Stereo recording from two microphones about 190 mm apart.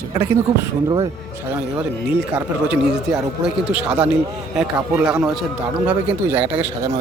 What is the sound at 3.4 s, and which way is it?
Speech, 5° right (ahead or behind).